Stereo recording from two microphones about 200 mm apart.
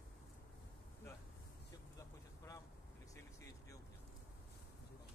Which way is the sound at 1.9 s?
15° left (ahead or behind).